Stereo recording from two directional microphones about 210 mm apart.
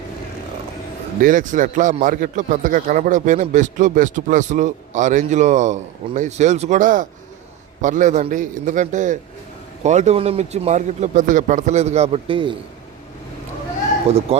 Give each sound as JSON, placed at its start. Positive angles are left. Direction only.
{"t": 1.2, "sound": "a man's voice", "side_deg": -40}
{"t": 14.1, "sound": "speech", "side_deg": -30}